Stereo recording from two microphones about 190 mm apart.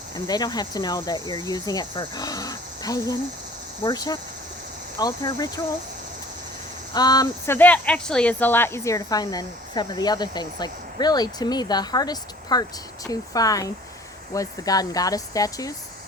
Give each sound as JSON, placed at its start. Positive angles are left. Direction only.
{"t": 0.3, "sound": "speech", "side_deg": 20}
{"t": 6.9, "sound": "speech", "side_deg": 20}